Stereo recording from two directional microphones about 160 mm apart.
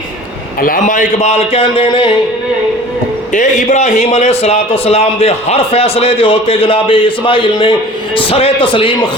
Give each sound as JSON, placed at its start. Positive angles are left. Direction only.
{"t": 0.6, "sound": "a man's voice", "side_deg": 60}
{"t": 3.3, "sound": "a man's voice", "side_deg": 50}